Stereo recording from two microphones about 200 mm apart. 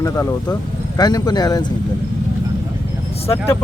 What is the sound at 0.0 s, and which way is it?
Speech, 15° left (ahead or behind).